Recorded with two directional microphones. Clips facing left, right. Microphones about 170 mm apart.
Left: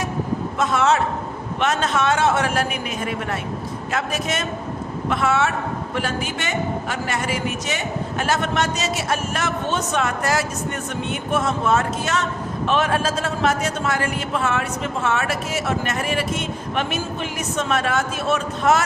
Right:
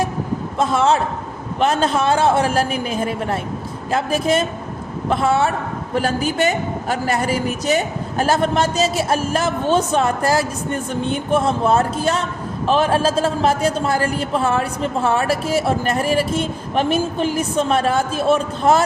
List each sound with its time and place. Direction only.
0.6 s a man's voice: 30° right (ahead or behind)